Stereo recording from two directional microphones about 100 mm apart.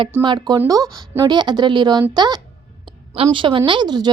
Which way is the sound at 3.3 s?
60° right (ahead or behind).